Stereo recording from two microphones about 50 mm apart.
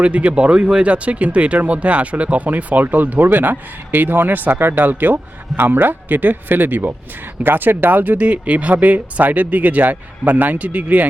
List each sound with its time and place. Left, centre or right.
0.0 s speech: right